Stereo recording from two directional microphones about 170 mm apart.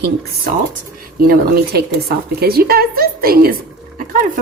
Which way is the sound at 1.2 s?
65° right (ahead or behind).